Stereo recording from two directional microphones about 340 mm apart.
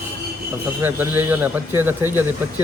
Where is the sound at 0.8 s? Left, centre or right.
Centre.